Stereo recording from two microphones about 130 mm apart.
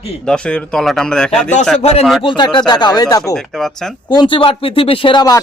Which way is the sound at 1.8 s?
55° left (ahead or behind).